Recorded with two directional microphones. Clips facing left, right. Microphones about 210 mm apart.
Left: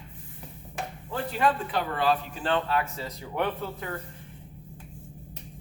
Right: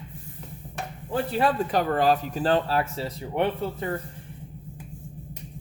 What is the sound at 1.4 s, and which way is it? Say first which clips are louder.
Speech: right 2 dB; 40° right (ahead or behind).